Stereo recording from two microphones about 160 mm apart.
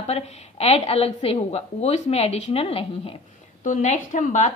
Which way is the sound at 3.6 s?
50° left (ahead or behind).